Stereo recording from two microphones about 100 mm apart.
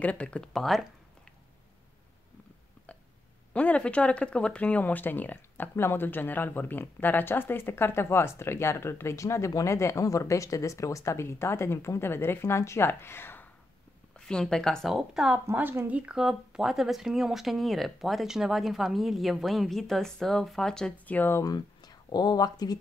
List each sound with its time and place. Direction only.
0.0 s speech: 15° left (ahead or behind)
3.5 s speech: 10° left (ahead or behind)
14.1 s speech: 5° left (ahead or behind)
15.4 s a woman's voice: 20° right (ahead or behind)
16.0 s speech: 5° right (ahead or behind); by 21.5 s 20° left (ahead or behind)
21.5 s speech: 45° left (ahead or behind)